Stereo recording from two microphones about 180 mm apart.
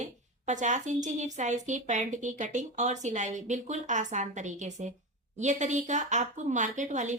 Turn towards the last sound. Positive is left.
turn(degrees=-45)  # may be behind; listen again after turning